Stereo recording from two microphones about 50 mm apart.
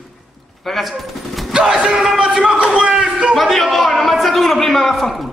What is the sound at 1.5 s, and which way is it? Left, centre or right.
Speech, centre.